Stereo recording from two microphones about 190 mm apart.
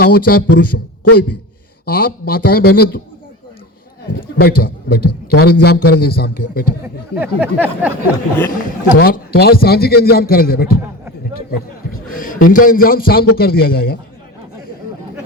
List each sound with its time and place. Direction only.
0.0 s a man's voice: 55° left (ahead or behind)
1.8 s a man's voice: 55° left (ahead or behind)
4.1 s a man's voice: 55° left (ahead or behind)
7.2 s a sound: 10° right (ahead or behind)
8.4 s a man's voice: 50° left (ahead or behind)
11.9 s a man's voice: 45° left (ahead or behind)